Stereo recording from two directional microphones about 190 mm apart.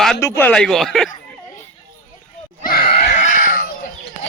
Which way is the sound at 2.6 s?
50° left (ahead or behind).